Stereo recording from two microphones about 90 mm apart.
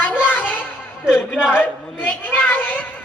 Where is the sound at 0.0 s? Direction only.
20° left (ahead or behind).